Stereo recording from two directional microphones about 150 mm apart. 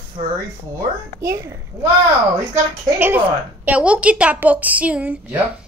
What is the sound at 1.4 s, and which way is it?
A woman's voice, 15° right (ahead or behind).